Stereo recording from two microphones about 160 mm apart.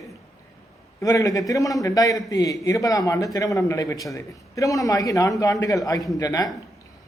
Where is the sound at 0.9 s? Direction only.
20° left (ahead or behind).